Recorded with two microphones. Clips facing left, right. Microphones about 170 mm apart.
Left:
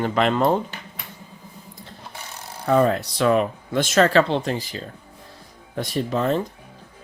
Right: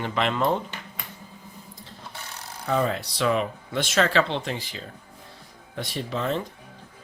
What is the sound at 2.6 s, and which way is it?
Speech, 55° left (ahead or behind).